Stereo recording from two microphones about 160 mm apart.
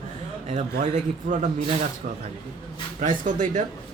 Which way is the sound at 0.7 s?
55° right (ahead or behind).